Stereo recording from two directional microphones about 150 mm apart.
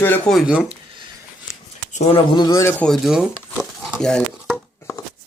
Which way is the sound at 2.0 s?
35° left (ahead or behind).